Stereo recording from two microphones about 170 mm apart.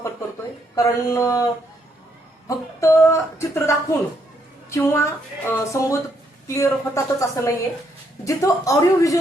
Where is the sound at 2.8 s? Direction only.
15° left (ahead or behind).